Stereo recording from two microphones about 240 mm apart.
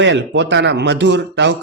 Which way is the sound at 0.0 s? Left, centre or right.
Right.